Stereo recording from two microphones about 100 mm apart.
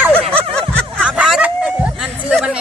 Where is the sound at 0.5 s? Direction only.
10° left (ahead or behind).